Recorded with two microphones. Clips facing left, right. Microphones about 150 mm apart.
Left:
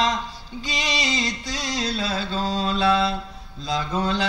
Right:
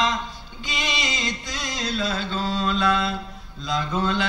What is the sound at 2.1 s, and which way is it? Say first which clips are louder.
Mantra: left 1 dB; 40° left (ahead or behind).